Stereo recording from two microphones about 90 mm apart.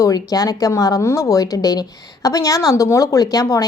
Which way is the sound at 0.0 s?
40° left (ahead or behind).